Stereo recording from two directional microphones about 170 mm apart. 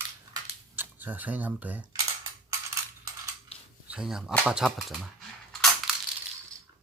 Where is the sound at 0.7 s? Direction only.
10° right (ahead or behind).